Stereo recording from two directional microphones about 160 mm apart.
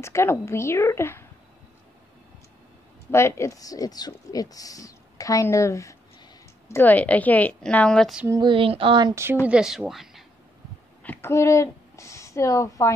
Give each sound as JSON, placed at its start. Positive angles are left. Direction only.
{"t": 0.0, "sound": "a woman's voice", "side_deg": 15}
{"t": 3.1, "sound": "a woman's voice", "side_deg": 15}
{"t": 8.3, "sound": "speech", "side_deg": -30}
{"t": 9.1, "sound": "speech", "side_deg": -15}
{"t": 9.5, "sound": "speech", "side_deg": -5}
{"t": 11.1, "sound": "speech", "side_deg": 15}